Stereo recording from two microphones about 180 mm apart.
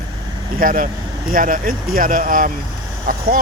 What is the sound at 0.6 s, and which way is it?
Speech, 50° right (ahead or behind).